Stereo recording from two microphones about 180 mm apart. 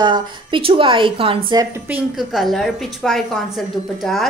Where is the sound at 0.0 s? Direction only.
25° right (ahead or behind).